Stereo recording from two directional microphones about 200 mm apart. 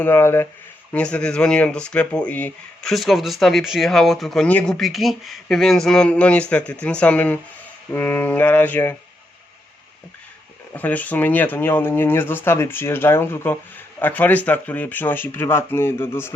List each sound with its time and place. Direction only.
0.0 s speech: 10° left (ahead or behind)
10.8 s speech: 10° left (ahead or behind)